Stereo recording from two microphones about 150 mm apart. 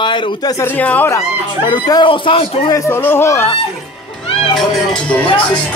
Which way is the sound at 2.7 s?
20° left (ahead or behind).